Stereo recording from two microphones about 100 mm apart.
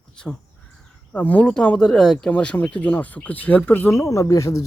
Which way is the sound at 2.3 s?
15° left (ahead or behind).